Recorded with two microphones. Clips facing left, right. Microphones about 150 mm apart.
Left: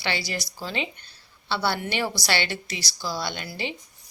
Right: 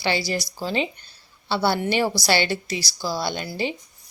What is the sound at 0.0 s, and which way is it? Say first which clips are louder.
Speech: right 5 dB; 35° right (ahead or behind).